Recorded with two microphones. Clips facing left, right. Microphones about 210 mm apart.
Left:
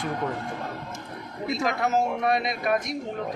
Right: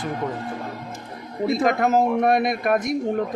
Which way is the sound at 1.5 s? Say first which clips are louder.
Right 5 dB; 50° right (ahead or behind).